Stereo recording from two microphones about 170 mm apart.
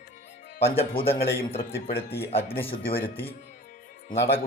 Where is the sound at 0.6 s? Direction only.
35° left (ahead or behind).